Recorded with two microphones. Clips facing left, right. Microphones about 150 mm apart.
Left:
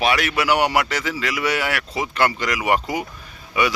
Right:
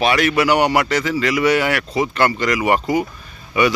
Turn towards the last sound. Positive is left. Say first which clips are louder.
# right 4 dB
turn(degrees=10)  # may be behind; listen again after turning